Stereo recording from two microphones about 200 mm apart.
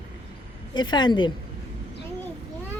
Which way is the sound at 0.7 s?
20° left (ahead or behind).